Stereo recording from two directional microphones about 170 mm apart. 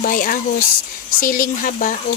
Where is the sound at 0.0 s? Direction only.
55° left (ahead or behind).